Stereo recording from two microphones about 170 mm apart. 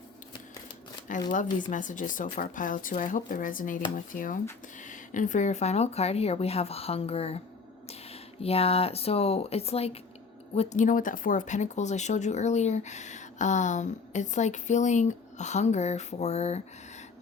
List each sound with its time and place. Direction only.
1.3 s speech: 50° left (ahead or behind)